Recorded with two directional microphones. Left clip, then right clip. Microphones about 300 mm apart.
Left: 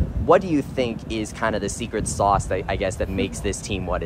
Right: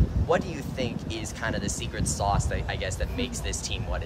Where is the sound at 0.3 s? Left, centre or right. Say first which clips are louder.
Left 10 dB; centre.